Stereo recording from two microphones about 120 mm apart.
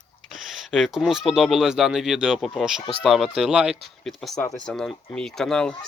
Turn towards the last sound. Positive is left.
turn(degrees=5)  # may be behind; listen again after turning